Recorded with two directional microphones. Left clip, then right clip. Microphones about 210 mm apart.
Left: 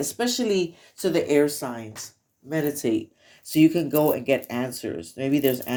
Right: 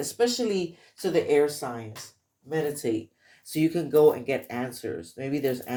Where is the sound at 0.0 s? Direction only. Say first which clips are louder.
Even; 40° left (ahead or behind).